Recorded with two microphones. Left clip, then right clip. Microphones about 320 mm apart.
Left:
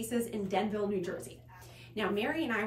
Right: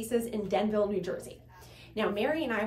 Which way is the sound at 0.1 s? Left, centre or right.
Centre.